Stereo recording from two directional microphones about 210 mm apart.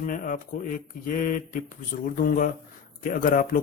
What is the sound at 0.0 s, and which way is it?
Speech, 40° left (ahead or behind).